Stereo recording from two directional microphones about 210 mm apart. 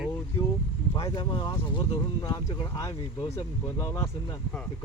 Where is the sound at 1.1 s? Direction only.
20° left (ahead or behind).